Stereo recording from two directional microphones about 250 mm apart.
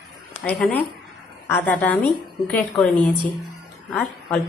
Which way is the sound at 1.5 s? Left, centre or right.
Centre.